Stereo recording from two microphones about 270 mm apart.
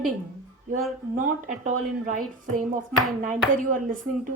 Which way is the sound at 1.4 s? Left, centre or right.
Right.